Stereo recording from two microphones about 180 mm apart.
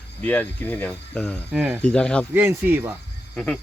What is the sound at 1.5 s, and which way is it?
Speech, 10° right (ahead or behind).